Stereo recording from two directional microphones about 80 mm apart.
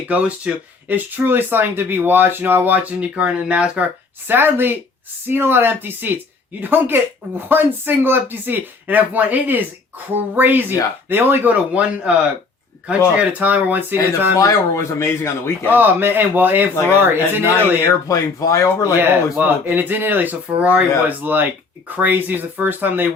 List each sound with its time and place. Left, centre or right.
0.1 s speech: centre
4.3 s speech: right
13.1 s speech: right
14.3 s speech: left
15.7 s speech: right
18.1 s speech: left
18.9 s speech: right